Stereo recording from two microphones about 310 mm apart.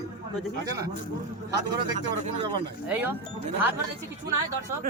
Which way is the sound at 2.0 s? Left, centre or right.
Right.